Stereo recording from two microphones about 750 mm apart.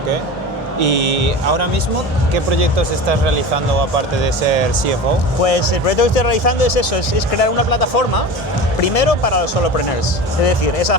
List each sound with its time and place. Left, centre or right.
0.8 s speech: right
5.4 s speech: left